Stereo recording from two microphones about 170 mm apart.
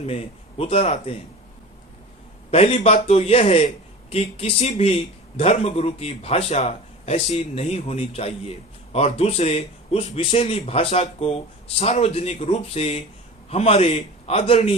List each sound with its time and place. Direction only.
0.0 s a man's voice: 35° left (ahead or behind)
2.5 s a man's voice: 40° left (ahead or behind)